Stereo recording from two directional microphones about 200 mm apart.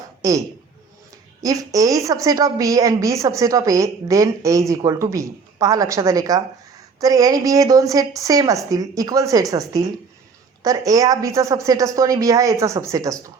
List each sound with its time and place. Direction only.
0.2 s a man's voice: 15° right (ahead or behind)